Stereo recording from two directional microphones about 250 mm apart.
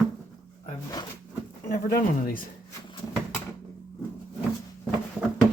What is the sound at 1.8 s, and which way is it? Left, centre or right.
Speech, left.